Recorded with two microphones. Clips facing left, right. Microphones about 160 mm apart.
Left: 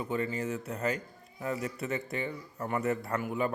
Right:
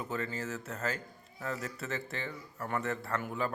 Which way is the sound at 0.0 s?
10° left (ahead or behind).